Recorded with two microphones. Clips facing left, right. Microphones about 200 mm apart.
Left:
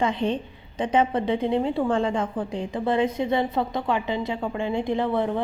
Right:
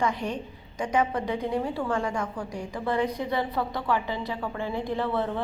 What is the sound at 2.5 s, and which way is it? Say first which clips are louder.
A woman's voice: left 4 dB; 20° left (ahead or behind).